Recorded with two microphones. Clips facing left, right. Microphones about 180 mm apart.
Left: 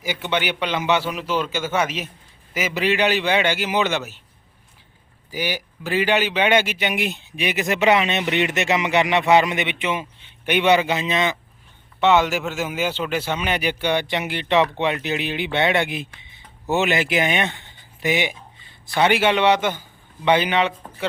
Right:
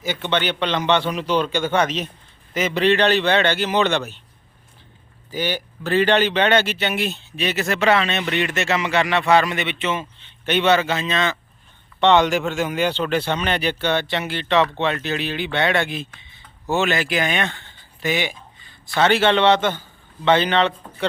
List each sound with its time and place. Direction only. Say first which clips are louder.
0.0 s a man's voice: right 1 dB; 10° left (ahead or behind)
5.3 s a man's voice: right 2 dB; 10° left (ahead or behind)
11.9 s a man's voice: right 2 dB; 5° left (ahead or behind)